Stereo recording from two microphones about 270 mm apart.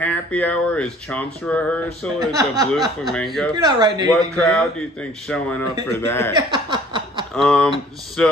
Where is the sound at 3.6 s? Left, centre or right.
Centre.